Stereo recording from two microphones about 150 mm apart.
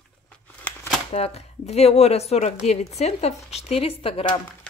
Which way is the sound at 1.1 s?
45° left (ahead or behind).